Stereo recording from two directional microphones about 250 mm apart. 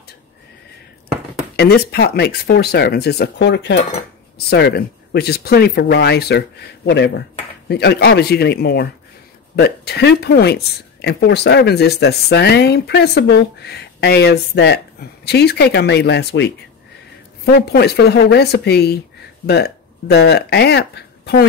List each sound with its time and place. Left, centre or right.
1.6 s speech: left